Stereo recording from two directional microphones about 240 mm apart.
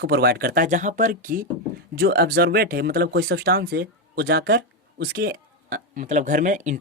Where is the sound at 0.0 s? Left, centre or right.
Right.